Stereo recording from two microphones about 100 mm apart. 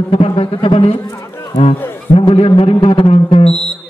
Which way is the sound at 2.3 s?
70° left (ahead or behind).